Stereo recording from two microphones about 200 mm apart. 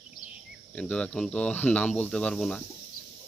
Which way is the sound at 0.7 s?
5° left (ahead or behind).